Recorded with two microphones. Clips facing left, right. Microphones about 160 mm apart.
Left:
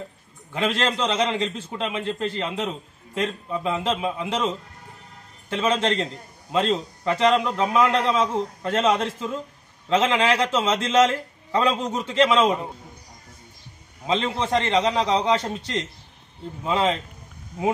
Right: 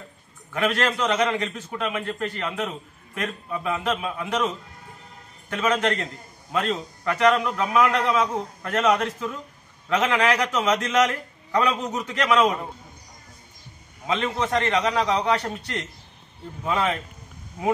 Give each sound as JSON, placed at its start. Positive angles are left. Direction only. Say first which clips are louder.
{"t": 0.5, "sound": "a man's voice", "louder": "even", "side_deg": 30}
{"t": 5.5, "sound": "a man's voice", "louder": "left 1 dB", "side_deg": 25}
{"t": 14.0, "sound": "a man's voice", "louder": "left 1 dB", "side_deg": 30}